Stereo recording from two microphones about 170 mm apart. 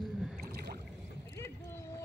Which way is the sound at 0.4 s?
65° right (ahead or behind).